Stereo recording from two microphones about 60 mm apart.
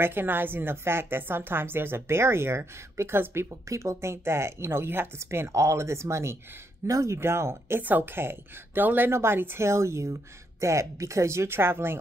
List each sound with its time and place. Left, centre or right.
0.0 s a woman's voice: right
3.4 s speech: right
7.2 s speech: right
7.8 s a woman's voice: right